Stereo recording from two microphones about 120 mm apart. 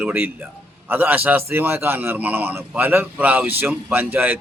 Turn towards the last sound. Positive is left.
turn(degrees=-15)  # may be behind; listen again after turning